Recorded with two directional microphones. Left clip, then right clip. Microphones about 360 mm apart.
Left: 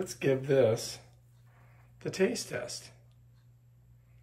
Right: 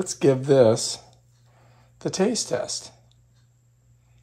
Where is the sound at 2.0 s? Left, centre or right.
Centre.